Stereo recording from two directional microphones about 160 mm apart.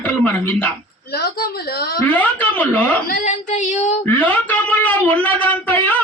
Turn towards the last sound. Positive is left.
turn(degrees=10)  # may be behind; listen again after turning